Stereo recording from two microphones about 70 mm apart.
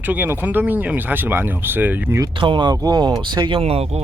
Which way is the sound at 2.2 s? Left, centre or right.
Right.